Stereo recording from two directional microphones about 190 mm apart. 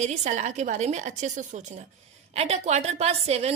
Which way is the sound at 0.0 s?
35° right (ahead or behind).